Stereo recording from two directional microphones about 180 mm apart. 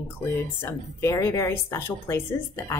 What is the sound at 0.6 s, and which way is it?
Speech, 15° left (ahead or behind).